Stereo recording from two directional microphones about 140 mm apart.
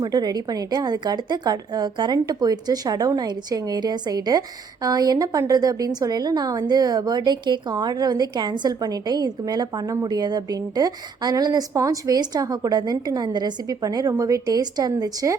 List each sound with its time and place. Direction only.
0.0 s a woman's voice: 30° right (ahead or behind)